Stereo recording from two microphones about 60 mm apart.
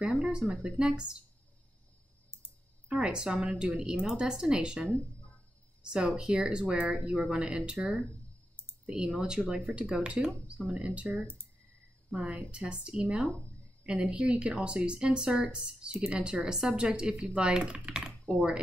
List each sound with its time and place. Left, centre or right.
0.2 s a woman's voice: centre
2.9 s a woman's voice: centre
6.7 s a woman's voice: right